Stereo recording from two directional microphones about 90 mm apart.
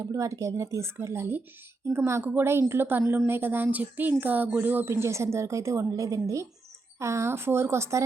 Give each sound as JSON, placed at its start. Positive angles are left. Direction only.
{"t": 0.0, "sound": "a woman's voice", "side_deg": -35}